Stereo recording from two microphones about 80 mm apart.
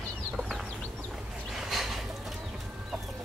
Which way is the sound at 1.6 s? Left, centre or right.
Centre.